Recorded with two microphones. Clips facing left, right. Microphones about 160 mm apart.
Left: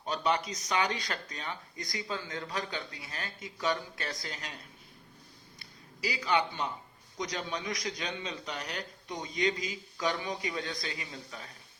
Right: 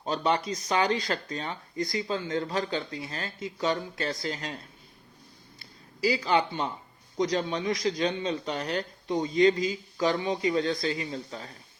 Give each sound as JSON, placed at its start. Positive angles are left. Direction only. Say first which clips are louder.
{"t": 0.0, "sound": "speech", "louder": "right 4 dB", "side_deg": -30}
{"t": 5.5, "sound": "a sound", "louder": "right 10 dB", "side_deg": -30}
{"t": 7.2, "sound": "a man's voice", "louder": "right 9 dB", "side_deg": -30}